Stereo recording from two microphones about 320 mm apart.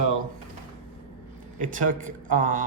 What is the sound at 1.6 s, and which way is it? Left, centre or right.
Speech, right.